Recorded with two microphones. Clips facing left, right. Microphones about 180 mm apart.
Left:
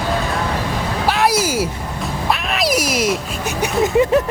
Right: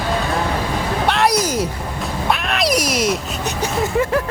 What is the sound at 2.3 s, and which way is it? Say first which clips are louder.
Quack: even; centre (ahead or behind).